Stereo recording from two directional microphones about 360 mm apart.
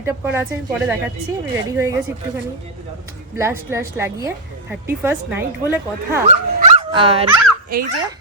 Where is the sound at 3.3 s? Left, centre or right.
Centre.